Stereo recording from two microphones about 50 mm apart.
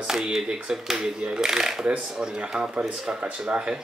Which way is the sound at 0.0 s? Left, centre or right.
Centre.